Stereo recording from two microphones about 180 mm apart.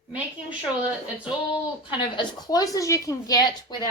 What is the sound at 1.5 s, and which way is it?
A woman's voice, 25° left (ahead or behind).